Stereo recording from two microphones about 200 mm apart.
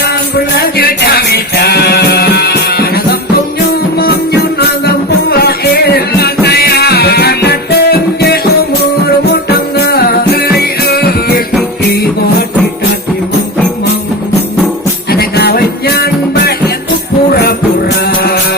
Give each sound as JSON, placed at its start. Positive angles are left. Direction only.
{"t": 0.3, "sound": "music", "side_deg": 50}
{"t": 15.1, "sound": "music", "side_deg": 50}
{"t": 18.0, "sound": "music", "side_deg": 50}